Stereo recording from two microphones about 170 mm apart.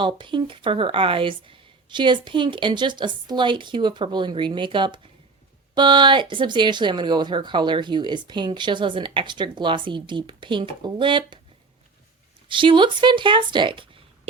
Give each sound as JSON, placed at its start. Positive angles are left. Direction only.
{"t": 0.0, "sound": "speech", "side_deg": -30}
{"t": 12.5, "sound": "speech", "side_deg": -30}